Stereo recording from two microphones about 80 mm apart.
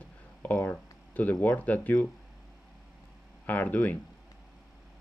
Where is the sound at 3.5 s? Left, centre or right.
Left.